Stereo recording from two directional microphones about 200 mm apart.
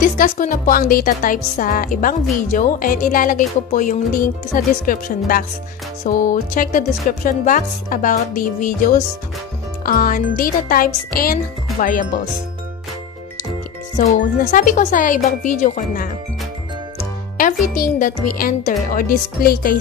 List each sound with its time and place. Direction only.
0.2 s speech: 45° left (ahead or behind)
13.9 s speech: 40° left (ahead or behind)
17.4 s speech: 45° left (ahead or behind)